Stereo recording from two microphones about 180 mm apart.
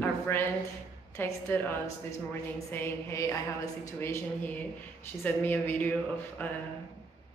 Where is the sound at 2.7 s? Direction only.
15° left (ahead or behind).